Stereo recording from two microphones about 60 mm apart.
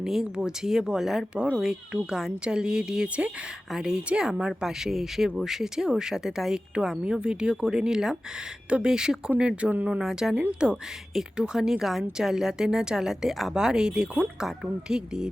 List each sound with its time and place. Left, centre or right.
0.0 s a woman's voice: centre
10.0 s a woman's voice: centre